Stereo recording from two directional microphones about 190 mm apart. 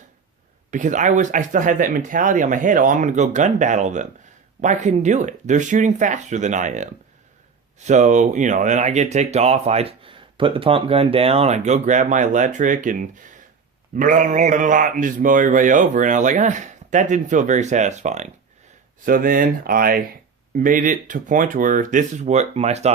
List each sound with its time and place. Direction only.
0.7 s speech: 40° right (ahead or behind)
7.9 s speech: 40° right (ahead or behind)
19.0 s speech: 45° right (ahead or behind)